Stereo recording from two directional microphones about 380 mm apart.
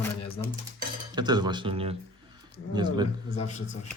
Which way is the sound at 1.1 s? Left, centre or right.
Centre.